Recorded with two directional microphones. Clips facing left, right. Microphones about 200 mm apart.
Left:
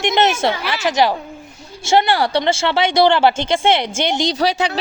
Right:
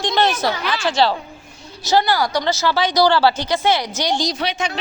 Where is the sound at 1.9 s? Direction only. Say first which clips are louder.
Left 2 dB; 25° left (ahead or behind).